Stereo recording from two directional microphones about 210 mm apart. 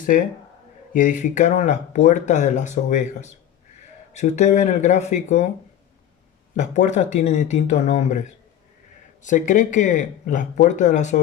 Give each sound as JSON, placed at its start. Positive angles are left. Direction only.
{"t": 0.9, "sound": "speech", "side_deg": 40}
{"t": 6.7, "sound": "speech", "side_deg": 35}